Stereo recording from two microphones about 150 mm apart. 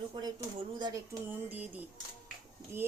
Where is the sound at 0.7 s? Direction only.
25° right (ahead or behind).